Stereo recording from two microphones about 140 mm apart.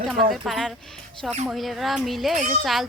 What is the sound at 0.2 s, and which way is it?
A woman's voice, centre (ahead or behind).